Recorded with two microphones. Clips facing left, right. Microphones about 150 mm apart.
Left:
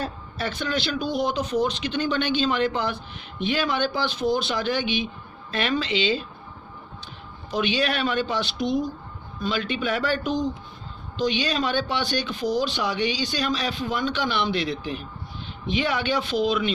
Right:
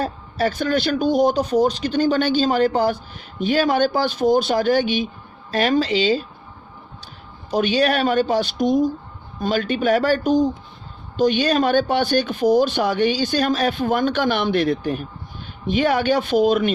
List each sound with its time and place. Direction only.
0.0 s speech: 40° right (ahead or behind)
7.5 s speech: 40° right (ahead or behind)